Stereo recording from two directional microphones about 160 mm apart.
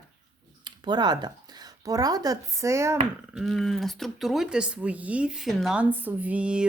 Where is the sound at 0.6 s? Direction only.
25° right (ahead or behind).